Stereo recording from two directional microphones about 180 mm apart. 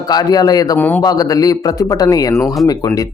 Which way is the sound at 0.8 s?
10° left (ahead or behind).